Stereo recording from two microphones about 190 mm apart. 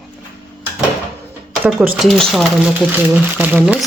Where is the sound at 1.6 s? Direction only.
5° right (ahead or behind).